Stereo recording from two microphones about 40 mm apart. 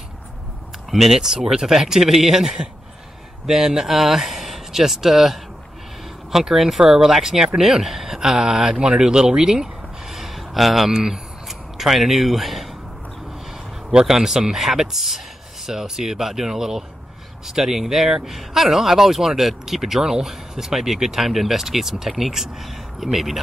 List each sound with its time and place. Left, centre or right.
0.8 s speech: centre
13.8 s speech: centre